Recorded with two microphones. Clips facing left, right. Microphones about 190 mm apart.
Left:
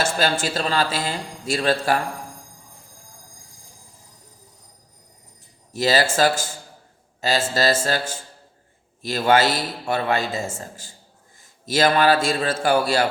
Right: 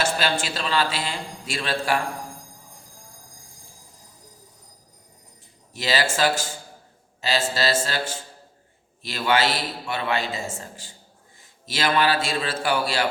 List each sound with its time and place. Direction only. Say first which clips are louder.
0.2 s a man's voice: left 4 dB; 40° left (ahead or behind)
5.7 s a man's voice: left 5 dB; 45° left (ahead or behind)